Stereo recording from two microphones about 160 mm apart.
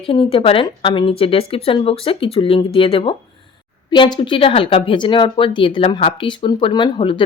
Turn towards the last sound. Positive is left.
turn(degrees=30)  # may be behind; listen again after turning